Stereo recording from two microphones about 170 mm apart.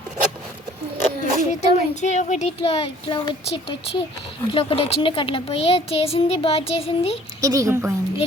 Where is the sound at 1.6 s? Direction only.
45° left (ahead or behind).